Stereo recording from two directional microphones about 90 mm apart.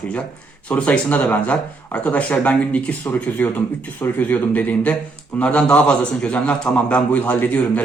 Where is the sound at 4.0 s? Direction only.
20° left (ahead or behind).